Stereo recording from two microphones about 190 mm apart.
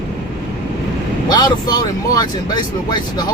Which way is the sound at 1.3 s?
20° left (ahead or behind).